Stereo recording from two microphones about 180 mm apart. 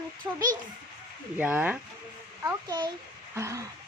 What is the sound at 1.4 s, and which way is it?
Speech, 10° right (ahead or behind).